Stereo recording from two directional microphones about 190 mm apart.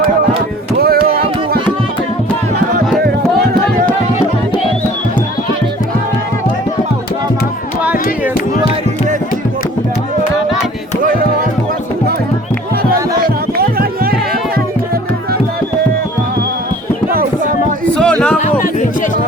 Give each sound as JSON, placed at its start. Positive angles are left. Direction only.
{"t": 0.8, "sound": "music", "side_deg": -55}
{"t": 13.6, "sound": "music", "side_deg": -50}
{"t": 17.9, "sound": "a sound", "side_deg": 5}
{"t": 18.3, "sound": "music", "side_deg": 40}